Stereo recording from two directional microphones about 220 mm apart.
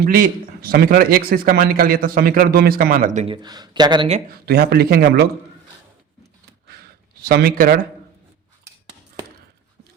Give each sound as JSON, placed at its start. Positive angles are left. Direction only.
{"t": 0.0, "sound": "a man's voice", "side_deg": -40}
{"t": 4.3, "sound": "a man's voice", "side_deg": -45}
{"t": 7.3, "sound": "a man's voice", "side_deg": -45}